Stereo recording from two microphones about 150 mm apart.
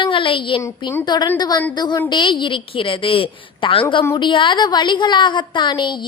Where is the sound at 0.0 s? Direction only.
35° left (ahead or behind).